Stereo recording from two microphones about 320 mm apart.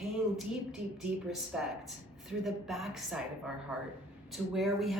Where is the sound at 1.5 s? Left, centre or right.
Centre.